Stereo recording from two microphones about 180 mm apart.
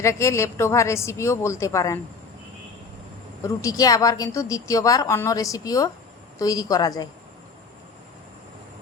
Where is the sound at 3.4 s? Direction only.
20° left (ahead or behind).